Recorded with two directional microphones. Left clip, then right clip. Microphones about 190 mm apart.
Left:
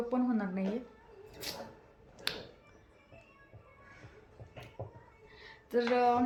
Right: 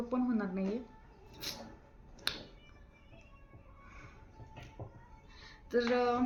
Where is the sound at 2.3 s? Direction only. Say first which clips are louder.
Even; 5° right (ahead or behind).